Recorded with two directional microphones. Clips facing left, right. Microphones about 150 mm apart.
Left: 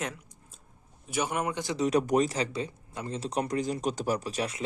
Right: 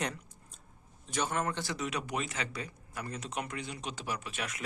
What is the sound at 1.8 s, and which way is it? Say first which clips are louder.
Speech: left 11 dB; 40° left (ahead or behind).